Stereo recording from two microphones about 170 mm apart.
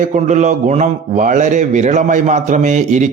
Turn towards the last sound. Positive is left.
turn(degrees=-45)  # may be behind; listen again after turning